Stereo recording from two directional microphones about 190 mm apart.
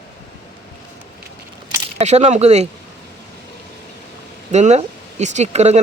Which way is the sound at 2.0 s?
35° right (ahead or behind).